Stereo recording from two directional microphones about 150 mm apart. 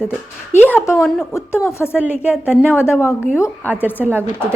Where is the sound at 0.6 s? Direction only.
15° left (ahead or behind).